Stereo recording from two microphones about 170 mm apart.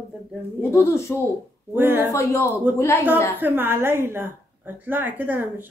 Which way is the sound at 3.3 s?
10° right (ahead or behind).